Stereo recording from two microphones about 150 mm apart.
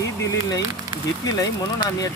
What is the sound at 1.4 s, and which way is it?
Speech, 25° left (ahead or behind).